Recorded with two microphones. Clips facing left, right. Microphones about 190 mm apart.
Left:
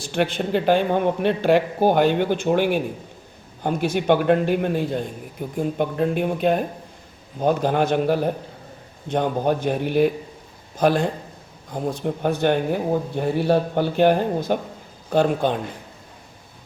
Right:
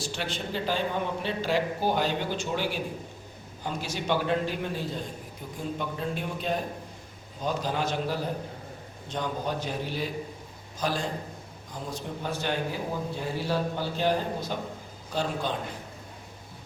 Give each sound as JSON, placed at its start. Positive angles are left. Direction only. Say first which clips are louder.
{"t": 0.0, "sound": "a man's voice", "louder": "left 10 dB", "side_deg": 60}